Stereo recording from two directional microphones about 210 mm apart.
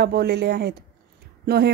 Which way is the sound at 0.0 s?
50° right (ahead or behind).